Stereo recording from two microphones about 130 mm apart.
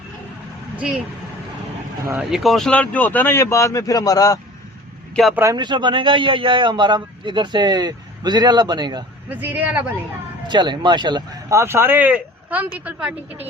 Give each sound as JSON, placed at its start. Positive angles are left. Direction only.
{"t": 2.1, "sound": "speech", "side_deg": 0}
{"t": 5.3, "sound": "a man's voice", "side_deg": -20}
{"t": 5.5, "sound": "a man's voice", "side_deg": -35}
{"t": 9.3, "sound": "speech", "side_deg": -15}
{"t": 10.4, "sound": "speech", "side_deg": -35}
{"t": 11.5, "sound": "speech", "side_deg": -20}